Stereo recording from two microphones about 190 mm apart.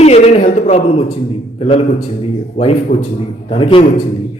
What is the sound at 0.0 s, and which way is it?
A man's voice, 35° left (ahead or behind).